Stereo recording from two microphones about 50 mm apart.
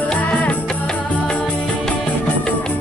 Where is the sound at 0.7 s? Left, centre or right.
Centre.